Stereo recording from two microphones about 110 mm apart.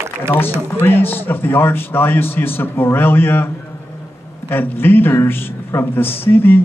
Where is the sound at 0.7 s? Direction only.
20° left (ahead or behind).